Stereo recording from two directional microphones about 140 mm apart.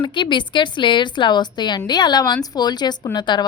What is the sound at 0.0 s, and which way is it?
A woman's voice, 35° left (ahead or behind).